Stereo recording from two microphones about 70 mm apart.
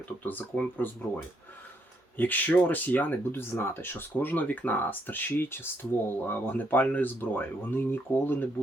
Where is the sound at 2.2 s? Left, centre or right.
Left.